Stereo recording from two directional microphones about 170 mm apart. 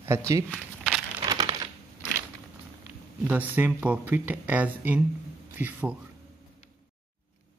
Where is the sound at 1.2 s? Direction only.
20° right (ahead or behind).